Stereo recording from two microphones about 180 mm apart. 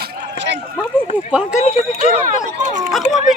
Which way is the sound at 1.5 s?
40° left (ahead or behind).